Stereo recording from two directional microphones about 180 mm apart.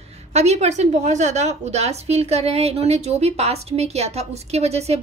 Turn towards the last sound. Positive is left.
turn(degrees=-35)  # may be behind; listen again after turning